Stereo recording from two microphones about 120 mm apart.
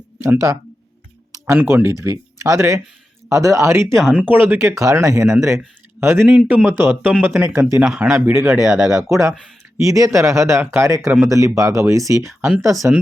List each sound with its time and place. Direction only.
0.2 s speech: 30° right (ahead or behind)
1.5 s speech: 20° right (ahead or behind)
3.9 s speech: 5° right (ahead or behind); by 4.9 s 25° right (ahead or behind)
5.2 s speech: 5° right (ahead or behind)
6.0 s speech: 20° right (ahead or behind)
6.2 s speech: 10° right (ahead or behind)
8.1 s speech: 25° right (ahead or behind)
8.4 s speech: 5° right (ahead or behind)
9.0 s speech: 25° right (ahead or behind)
12.7 s speech: centre (ahead or behind)